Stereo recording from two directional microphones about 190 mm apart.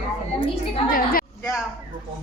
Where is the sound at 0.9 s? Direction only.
50° left (ahead or behind).